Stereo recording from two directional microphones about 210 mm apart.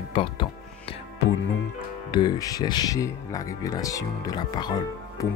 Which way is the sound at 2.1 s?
20° left (ahead or behind).